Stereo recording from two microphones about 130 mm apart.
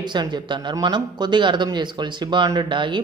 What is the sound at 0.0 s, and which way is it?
Speech, 35° right (ahead or behind).